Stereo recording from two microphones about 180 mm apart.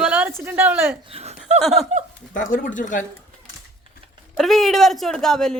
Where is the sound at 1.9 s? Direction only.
40° right (ahead or behind).